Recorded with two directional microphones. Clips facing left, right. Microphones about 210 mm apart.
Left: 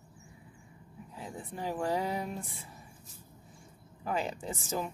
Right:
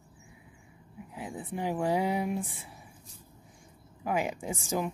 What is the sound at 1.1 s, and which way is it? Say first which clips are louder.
Speech: right 5 dB; 15° right (ahead or behind).